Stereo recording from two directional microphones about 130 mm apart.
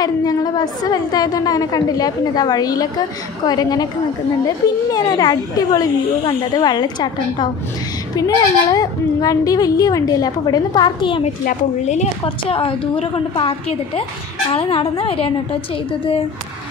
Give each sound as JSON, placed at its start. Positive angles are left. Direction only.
{"t": 0.0, "sound": "a woman's voice", "side_deg": 30}
{"t": 11.2, "sound": "a woman's voice", "side_deg": 60}
{"t": 12.4, "sound": "a woman's voice", "side_deg": 45}